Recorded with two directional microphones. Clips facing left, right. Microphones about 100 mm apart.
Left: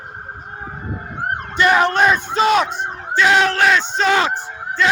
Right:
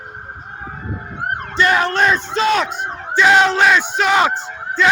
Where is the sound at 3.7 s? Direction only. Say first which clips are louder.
Right 1 dB; 10° right (ahead or behind).